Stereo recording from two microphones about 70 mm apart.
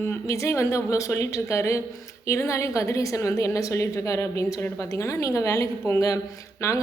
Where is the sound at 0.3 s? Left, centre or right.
Left.